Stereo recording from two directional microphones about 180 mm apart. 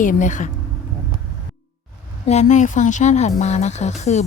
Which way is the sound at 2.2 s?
40° left (ahead or behind).